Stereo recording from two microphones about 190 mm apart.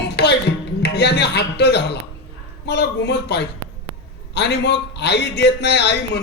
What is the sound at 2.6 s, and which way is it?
A man's voice, 65° left (ahead or behind).